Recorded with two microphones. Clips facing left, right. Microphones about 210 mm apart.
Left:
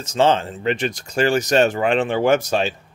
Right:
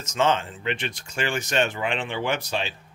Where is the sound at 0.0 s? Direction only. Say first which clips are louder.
Left 6 dB; 35° left (ahead or behind).